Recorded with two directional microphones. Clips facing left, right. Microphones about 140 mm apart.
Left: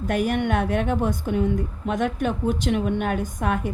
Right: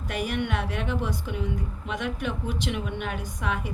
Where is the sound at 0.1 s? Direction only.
50° left (ahead or behind).